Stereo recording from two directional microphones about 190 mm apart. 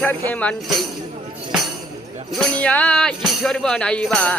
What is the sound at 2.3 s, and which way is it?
Speech, 5° left (ahead or behind).